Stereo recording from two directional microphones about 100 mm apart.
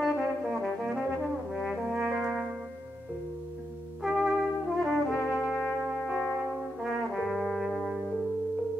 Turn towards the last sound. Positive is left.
turn(degrees=0)  # may be behind; listen again after turning